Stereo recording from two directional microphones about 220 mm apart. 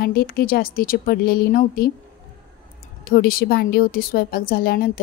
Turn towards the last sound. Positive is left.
turn(degrees=45)  # may be behind; listen again after turning